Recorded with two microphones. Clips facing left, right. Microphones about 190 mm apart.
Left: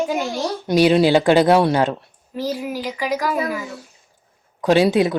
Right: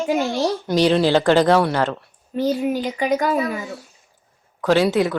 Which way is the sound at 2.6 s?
30° right (ahead or behind).